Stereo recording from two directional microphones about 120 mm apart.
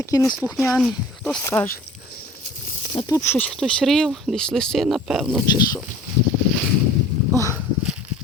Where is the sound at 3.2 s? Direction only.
15° left (ahead or behind); by 5.4 s centre (ahead or behind).